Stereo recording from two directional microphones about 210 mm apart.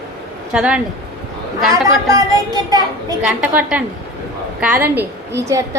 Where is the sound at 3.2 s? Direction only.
5° right (ahead or behind).